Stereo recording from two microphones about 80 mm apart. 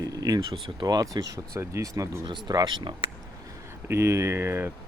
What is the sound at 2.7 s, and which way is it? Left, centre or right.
Speech, right.